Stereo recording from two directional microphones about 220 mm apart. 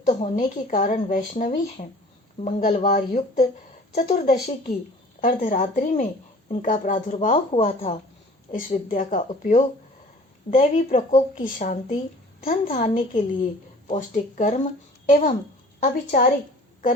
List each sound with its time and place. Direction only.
0.0 s a woman's voice: 35° left (ahead or behind)
2.8 s a woman's voice: 35° left (ahead or behind)